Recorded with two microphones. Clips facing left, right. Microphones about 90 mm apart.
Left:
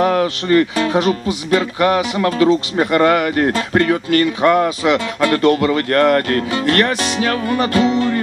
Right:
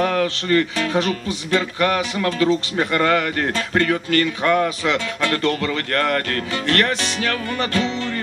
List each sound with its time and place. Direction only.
0.0 s speech: 25° left (ahead or behind)